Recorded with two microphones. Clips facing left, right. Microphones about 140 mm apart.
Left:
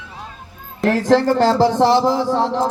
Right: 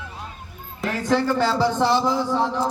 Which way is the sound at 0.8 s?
75° left (ahead or behind).